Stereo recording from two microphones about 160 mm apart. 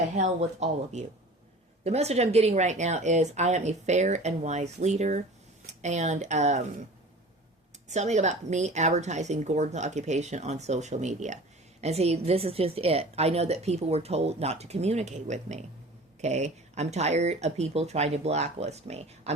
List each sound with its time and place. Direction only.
0.2 s a woman's voice: 45° right (ahead or behind)
7.9 s a woman's voice: 45° right (ahead or behind)